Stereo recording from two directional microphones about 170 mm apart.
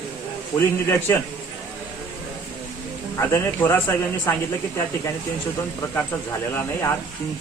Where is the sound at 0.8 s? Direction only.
15° left (ahead or behind).